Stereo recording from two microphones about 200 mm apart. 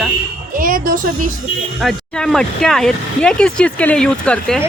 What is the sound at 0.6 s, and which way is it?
Speech, 45° right (ahead or behind).